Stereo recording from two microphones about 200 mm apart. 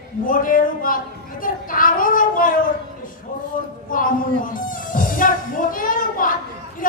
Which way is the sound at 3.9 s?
45° left (ahead or behind).